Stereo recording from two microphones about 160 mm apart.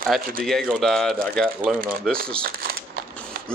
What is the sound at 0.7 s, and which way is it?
Speech, centre (ahead or behind).